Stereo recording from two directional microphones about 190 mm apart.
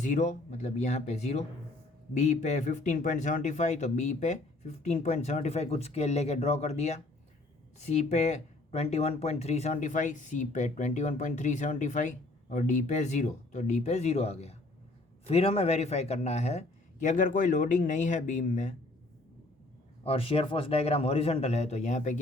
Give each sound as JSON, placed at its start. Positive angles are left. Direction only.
{"t": 0.0, "sound": "speech", "side_deg": 40}
{"t": 20.1, "sound": "speech", "side_deg": 30}